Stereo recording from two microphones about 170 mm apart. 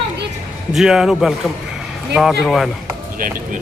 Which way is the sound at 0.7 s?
5° right (ahead or behind).